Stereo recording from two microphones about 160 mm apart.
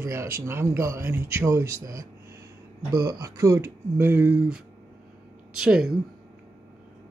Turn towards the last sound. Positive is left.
turn(degrees=-5)  # may be behind; listen again after turning